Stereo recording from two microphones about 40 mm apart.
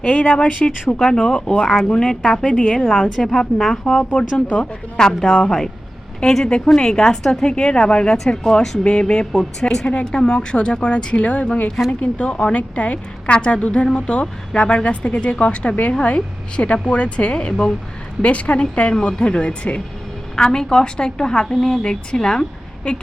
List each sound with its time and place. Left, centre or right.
0.0 s a woman's voice: left
0.3 s a woman's voice: left
4.9 s a woman's voice: centre
9.8 s a woman's voice: left
16.0 s a woman's voice: left
18.2 s a woman's voice: left